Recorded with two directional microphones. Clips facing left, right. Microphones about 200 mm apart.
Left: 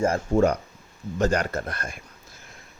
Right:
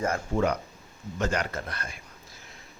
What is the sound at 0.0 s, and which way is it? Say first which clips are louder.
A man's voice: left 6 dB; 35° left (ahead or behind).